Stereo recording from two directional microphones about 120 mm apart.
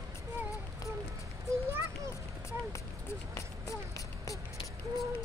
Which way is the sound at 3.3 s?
25° left (ahead or behind).